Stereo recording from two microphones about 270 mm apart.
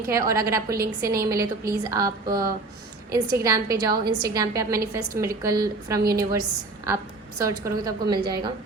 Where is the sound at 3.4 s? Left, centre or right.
Centre.